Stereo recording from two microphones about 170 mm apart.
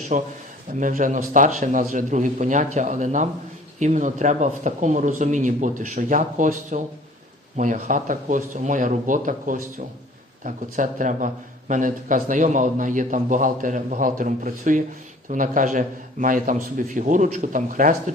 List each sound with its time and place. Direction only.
0.1 s speech: 45° right (ahead or behind)